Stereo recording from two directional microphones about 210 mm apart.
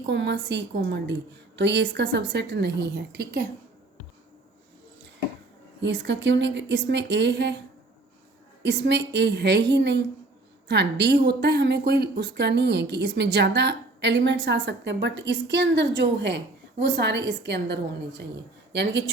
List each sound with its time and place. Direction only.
0.0 s a woman's voice: 55° right (ahead or behind)
5.8 s a woman's voice: 60° right (ahead or behind)
8.6 s a woman's voice: 55° right (ahead or behind)